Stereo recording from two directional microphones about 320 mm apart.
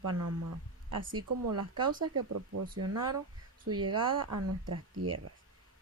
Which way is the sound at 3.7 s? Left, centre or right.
Right.